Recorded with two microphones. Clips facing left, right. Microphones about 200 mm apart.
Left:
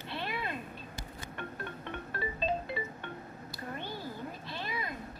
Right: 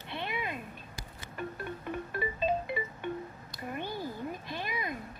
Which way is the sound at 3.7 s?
15° right (ahead or behind).